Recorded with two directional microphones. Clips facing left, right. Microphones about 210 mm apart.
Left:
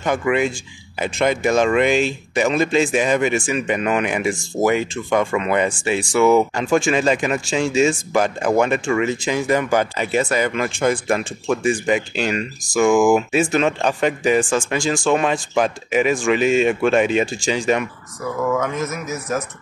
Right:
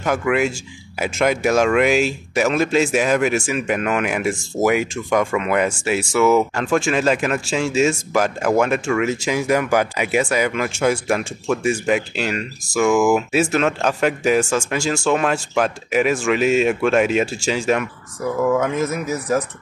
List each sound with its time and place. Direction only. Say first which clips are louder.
0.0 s speech: even; centre (ahead or behind)
18.9 s speech: right 4 dB; 30° right (ahead or behind)